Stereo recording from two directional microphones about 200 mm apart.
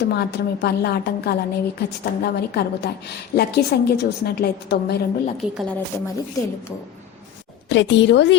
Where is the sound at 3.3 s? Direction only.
55° left (ahead or behind).